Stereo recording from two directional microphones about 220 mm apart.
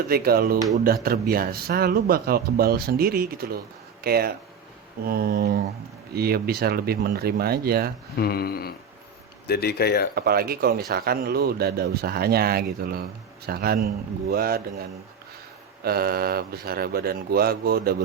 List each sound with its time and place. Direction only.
0.1 s speech: 45° right (ahead or behind)
8.1 s a sound: 45° left (ahead or behind)
10.2 s speech: 45° right (ahead or behind)
15.8 s speech: 45° right (ahead or behind)